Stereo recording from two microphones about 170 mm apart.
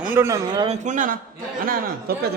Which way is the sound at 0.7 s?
50° right (ahead or behind).